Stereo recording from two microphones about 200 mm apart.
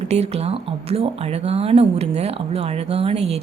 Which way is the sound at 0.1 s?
30° right (ahead or behind).